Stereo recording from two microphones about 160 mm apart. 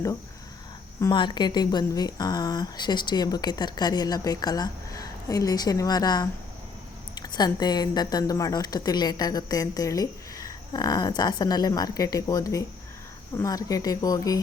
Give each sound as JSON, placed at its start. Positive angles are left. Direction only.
{"t": 1.0, "sound": "a woman's voice", "side_deg": 25}